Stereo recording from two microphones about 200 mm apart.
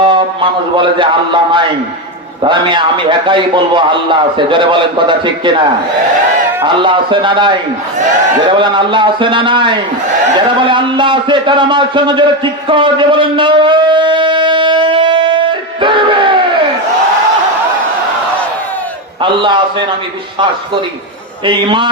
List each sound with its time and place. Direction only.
0.0 s a man's voice: 25° right (ahead or behind)
6.7 s a man's voice: 25° right (ahead or behind)
12.6 s shofar: 25° right (ahead or behind)
19.2 s a man's voice: 25° right (ahead or behind)
21.4 s a man's voice: 25° right (ahead or behind)